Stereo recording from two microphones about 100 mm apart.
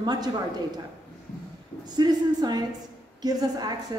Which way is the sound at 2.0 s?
45° right (ahead or behind).